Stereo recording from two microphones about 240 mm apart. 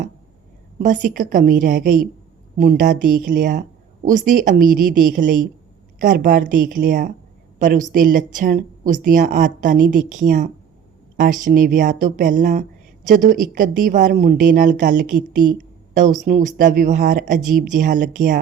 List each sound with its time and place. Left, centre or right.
0.8 s a woman's voice: right